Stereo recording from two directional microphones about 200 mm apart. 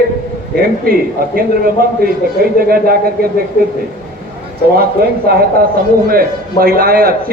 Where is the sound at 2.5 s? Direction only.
50° right (ahead or behind).